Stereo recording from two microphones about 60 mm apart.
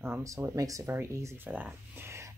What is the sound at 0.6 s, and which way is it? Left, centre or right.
Speech, right.